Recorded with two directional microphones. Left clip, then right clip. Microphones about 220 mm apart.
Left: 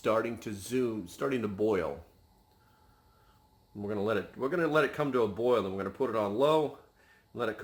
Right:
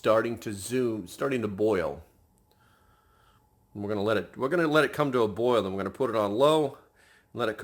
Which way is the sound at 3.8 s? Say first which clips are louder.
Right 4 dB; 50° right (ahead or behind).